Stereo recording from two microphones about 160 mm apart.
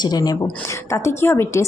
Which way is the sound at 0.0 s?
25° left (ahead or behind).